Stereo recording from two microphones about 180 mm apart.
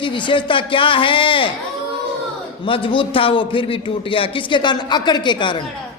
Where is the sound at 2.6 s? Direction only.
30° left (ahead or behind).